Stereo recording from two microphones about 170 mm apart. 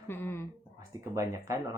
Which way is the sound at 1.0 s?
15° right (ahead or behind).